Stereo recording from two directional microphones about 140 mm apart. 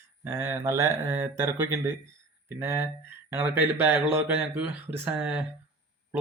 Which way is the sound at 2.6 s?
20° right (ahead or behind).